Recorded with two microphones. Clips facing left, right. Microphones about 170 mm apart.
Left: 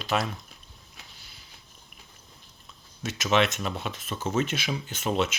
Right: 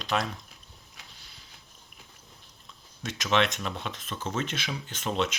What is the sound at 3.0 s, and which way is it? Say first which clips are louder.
Speech: left 2 dB; 5° left (ahead or behind).